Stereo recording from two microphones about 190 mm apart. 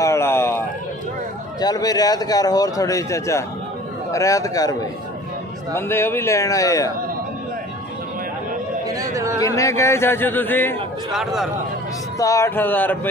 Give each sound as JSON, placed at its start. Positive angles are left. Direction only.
{"t": 0.0, "sound": "a sound", "side_deg": 15}
{"t": 1.6, "sound": "a man's voice", "side_deg": 20}
{"t": 5.8, "sound": "speech", "side_deg": 10}
{"t": 8.8, "sound": "chatter", "side_deg": -15}
{"t": 9.4, "sound": "a man's voice", "side_deg": 15}
{"t": 12.2, "sound": "speech", "side_deg": 15}